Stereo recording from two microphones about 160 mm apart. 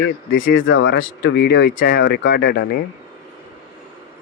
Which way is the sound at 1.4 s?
90° left.